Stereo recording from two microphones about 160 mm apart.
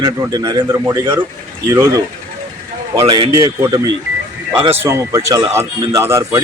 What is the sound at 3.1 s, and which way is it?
Speech, 35° right (ahead or behind).